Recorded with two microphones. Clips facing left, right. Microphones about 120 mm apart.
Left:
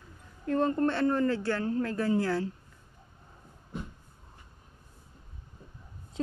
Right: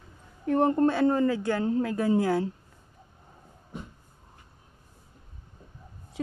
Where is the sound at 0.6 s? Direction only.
20° right (ahead or behind).